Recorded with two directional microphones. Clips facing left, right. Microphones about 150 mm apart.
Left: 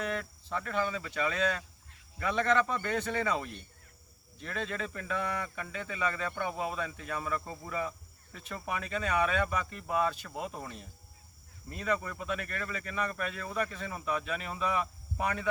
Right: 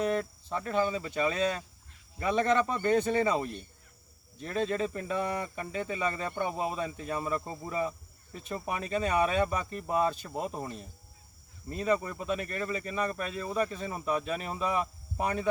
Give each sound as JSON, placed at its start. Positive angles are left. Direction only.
{"t": 0.0, "sound": "speech", "side_deg": -35}
{"t": 2.1, "sound": "speech", "side_deg": -20}